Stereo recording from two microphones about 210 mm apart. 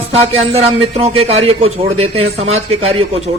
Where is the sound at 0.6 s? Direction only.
30° right (ahead or behind).